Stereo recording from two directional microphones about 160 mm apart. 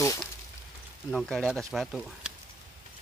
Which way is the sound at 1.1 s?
Centre (ahead or behind).